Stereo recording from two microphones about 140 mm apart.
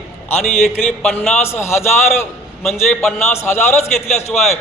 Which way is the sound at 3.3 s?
15° left (ahead or behind).